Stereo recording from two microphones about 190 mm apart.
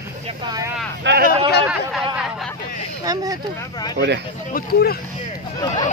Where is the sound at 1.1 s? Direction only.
70° right (ahead or behind).